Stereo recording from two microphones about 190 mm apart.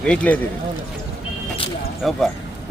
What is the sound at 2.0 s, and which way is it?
Speech, centre (ahead or behind).